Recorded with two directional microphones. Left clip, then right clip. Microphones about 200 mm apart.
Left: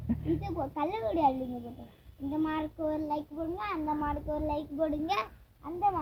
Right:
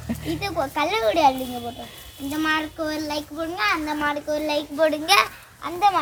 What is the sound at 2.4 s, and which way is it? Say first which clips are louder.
A child's voice: right 9 dB; 50° right (ahead or behind).